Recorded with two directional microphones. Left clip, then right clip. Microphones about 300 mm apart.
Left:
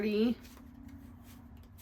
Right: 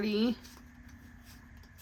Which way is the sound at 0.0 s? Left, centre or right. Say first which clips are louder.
Even; centre.